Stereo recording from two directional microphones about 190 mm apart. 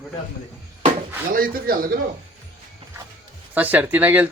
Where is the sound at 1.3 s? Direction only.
50° right (ahead or behind).